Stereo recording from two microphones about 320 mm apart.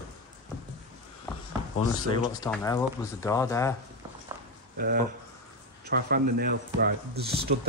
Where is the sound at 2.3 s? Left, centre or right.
Centre.